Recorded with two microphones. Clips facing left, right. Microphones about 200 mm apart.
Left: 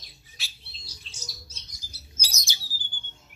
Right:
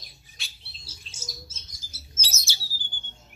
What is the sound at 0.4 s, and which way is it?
Bird, centre (ahead or behind).